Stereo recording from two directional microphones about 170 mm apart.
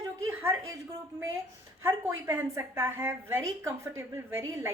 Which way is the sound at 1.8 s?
10° right (ahead or behind).